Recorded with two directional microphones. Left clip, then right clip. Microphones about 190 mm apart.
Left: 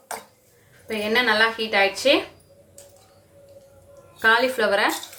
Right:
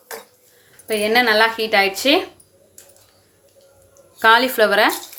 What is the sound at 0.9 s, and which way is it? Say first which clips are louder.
A woman's voice: right 5 dB; 40° right (ahead or behind).